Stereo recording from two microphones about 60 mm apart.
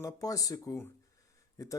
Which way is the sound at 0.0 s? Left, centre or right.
Left.